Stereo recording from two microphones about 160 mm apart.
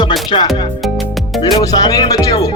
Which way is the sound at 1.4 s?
25° left (ahead or behind).